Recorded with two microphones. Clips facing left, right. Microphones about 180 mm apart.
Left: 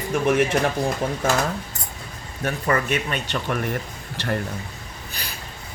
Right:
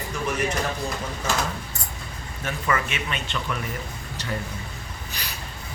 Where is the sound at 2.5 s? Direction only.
45° left (ahead or behind).